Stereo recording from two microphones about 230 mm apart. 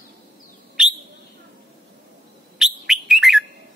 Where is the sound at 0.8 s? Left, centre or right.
Centre.